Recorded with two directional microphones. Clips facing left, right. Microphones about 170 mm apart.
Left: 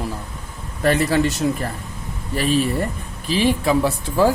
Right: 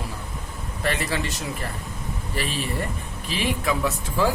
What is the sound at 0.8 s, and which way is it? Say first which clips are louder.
Speech: left 8 dB; 45° left (ahead or behind).